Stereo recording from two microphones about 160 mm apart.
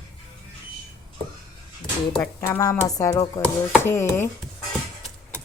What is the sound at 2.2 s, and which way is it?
Speech, 15° left (ahead or behind).